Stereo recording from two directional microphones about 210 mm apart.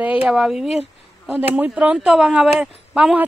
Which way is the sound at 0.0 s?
5° right (ahead or behind).